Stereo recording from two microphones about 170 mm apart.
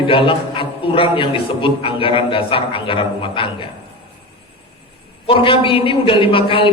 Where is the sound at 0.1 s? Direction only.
30° left (ahead or behind).